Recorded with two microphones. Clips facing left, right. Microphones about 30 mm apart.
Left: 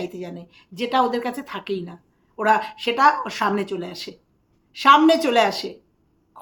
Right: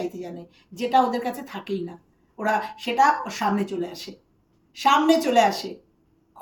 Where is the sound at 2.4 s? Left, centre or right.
Left.